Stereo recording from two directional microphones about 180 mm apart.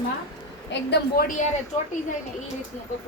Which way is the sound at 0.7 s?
65° left (ahead or behind).